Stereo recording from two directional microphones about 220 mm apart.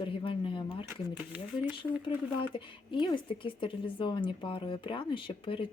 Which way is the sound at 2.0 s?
25° left (ahead or behind).